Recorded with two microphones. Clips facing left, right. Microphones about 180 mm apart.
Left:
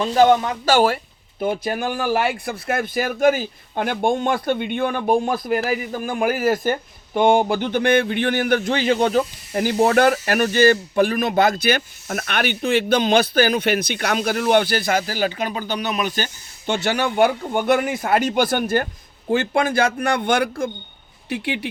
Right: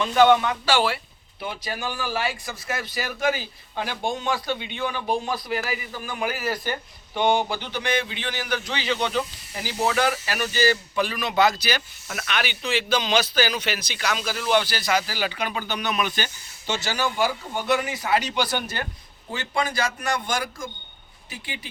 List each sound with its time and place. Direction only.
0.0 s speech: 35° left (ahead or behind); by 21.7 s 65° left (ahead or behind)